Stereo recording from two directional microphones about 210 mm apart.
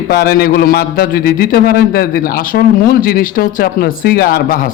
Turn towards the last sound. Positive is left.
turn(degrees=45)  # may be behind; listen again after turning